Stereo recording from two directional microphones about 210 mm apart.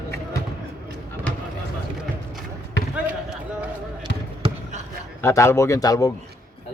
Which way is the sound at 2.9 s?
5° right (ahead or behind).